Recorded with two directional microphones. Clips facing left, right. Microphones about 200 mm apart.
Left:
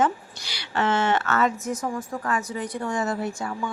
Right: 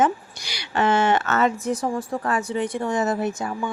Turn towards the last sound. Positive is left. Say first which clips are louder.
# right 3 dB
turn(degrees=-20)  # may be behind; listen again after turning